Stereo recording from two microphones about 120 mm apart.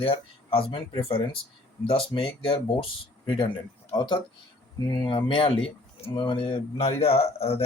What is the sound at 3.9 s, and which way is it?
A man's voice, 40° left (ahead or behind).